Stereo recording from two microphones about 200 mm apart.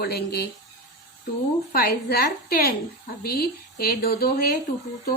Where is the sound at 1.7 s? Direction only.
50° left (ahead or behind).